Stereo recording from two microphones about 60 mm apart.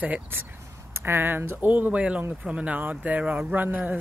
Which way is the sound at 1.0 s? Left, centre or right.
Right.